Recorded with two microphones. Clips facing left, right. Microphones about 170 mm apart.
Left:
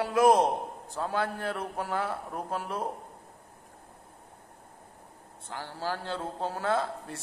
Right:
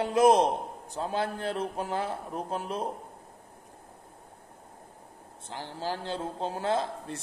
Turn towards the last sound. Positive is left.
turn(degrees=-20)  # may be behind; listen again after turning